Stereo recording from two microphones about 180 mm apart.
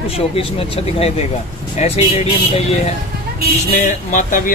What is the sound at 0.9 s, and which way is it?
Speech, 35° left (ahead or behind).